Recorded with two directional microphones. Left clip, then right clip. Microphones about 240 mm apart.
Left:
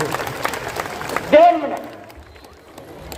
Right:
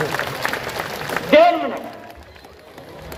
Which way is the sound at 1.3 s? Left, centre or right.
Right.